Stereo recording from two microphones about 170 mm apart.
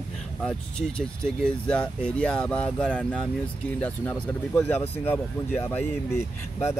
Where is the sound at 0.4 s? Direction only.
5° left (ahead or behind).